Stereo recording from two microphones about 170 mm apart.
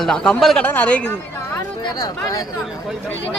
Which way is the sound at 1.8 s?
20° left (ahead or behind).